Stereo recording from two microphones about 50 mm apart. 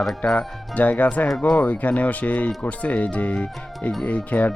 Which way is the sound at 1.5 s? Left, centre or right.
Left.